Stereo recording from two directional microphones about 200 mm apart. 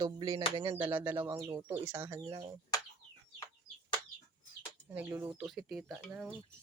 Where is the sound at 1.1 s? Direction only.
15° right (ahead or behind).